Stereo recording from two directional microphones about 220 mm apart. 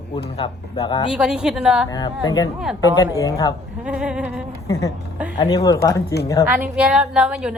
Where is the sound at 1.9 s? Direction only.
20° left (ahead or behind).